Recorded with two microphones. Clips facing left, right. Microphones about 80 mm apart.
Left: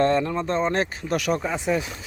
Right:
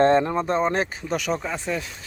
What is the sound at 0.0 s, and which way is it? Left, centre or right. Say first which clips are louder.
Speech: right 3 dB; right.